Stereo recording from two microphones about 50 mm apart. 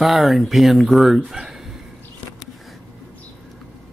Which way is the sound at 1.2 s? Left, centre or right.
Centre.